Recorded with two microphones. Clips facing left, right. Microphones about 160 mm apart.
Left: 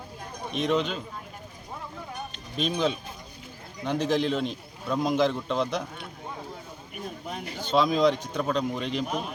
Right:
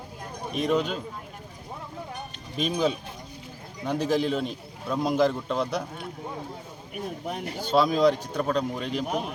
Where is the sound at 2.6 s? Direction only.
10° right (ahead or behind).